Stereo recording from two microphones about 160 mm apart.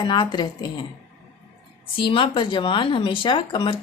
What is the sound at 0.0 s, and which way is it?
Speech, 30° left (ahead or behind).